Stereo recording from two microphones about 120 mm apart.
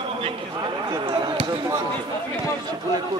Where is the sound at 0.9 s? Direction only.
45° right (ahead or behind).